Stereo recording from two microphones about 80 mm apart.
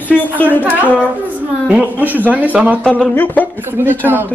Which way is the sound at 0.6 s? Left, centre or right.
Right.